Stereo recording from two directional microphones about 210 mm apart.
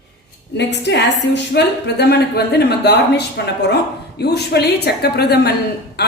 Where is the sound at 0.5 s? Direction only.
55° left (ahead or behind).